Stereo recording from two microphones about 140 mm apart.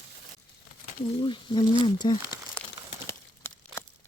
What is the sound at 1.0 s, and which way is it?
Speech, 35° left (ahead or behind).